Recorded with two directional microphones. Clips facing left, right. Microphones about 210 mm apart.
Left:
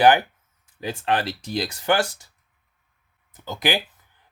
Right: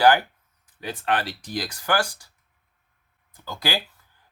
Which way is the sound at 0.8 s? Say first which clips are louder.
Left 2 dB; 25° left (ahead or behind).